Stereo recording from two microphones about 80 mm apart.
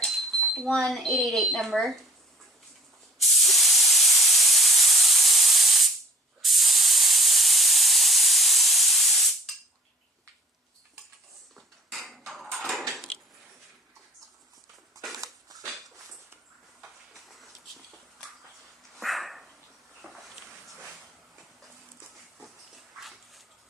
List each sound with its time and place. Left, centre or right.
0.0 s dishes: centre
0.5 s speech: centre
3.2 s spray: centre
6.4 s steam: centre
11.5 s a sound: centre
15.2 s dog: right
15.6 s a sound: centre
18.9 s dog: centre
20.0 s a sound: centre
22.4 s pig: centre